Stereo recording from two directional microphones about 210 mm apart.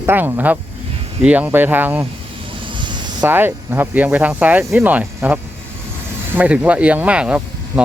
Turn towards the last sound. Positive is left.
turn(degrees=-5)  # may be behind; listen again after turning